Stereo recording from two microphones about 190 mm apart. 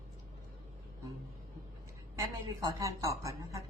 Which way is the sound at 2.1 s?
15° right (ahead or behind).